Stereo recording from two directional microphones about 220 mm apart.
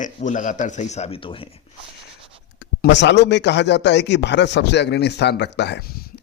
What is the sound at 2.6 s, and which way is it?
Speech, 50° left (ahead or behind).